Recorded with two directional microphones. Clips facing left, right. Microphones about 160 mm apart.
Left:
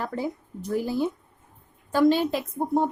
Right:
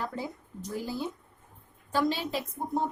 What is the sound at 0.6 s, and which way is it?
A woman's voice, 60° left (ahead or behind).